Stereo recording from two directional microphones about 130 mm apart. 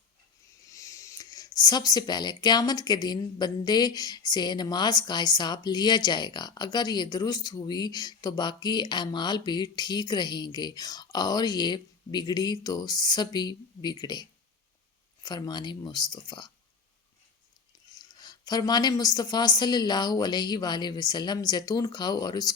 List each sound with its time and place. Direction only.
0.7 s speech: 25° left (ahead or behind)
17.9 s speech: 30° left (ahead or behind)